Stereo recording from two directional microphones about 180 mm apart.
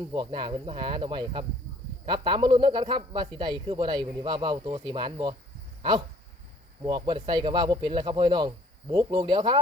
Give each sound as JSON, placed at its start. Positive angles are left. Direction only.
{"t": 0.1, "sound": "speech", "side_deg": -25}
{"t": 6.8, "sound": "speech", "side_deg": -25}